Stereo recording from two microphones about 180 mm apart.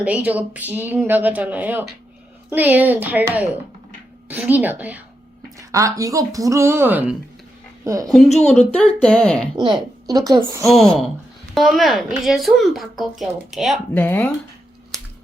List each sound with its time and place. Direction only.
0.0 s a woman's voice: 5° right (ahead or behind)
8.4 s speech: 5° left (ahead or behind)
9.6 s a woman's voice: 25° right (ahead or behind)
10.7 s speech: centre (ahead or behind)
13.9 s speech: 10° left (ahead or behind)